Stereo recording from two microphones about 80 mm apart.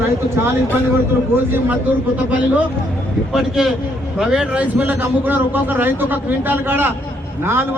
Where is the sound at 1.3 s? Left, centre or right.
Right.